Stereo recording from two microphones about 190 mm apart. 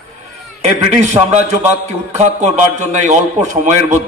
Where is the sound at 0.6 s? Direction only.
35° right (ahead or behind).